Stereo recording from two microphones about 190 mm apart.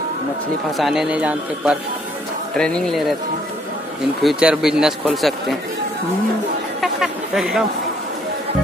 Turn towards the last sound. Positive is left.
turn(degrees=-5)  # may be behind; listen again after turning